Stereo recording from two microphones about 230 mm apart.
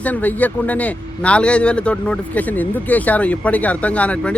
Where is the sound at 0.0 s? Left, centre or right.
Centre.